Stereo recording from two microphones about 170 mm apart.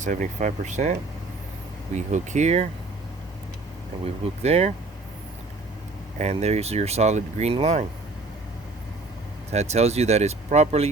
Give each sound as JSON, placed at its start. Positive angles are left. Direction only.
{"t": 0.0, "sound": "speech", "side_deg": -45}
{"t": 2.1, "sound": "speech", "side_deg": -45}
{"t": 4.0, "sound": "speech", "side_deg": -40}
{"t": 6.1, "sound": "speech", "side_deg": -40}
{"t": 9.5, "sound": "speech", "side_deg": -40}